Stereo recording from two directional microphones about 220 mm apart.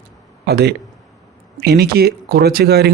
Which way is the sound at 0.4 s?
45° right (ahead or behind).